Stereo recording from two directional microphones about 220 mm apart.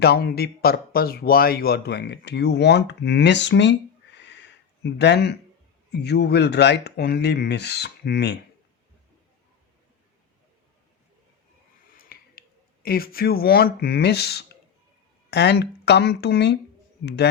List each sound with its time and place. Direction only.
0.0 s speech: 45° left (ahead or behind)
11.9 s speech: 40° left (ahead or behind)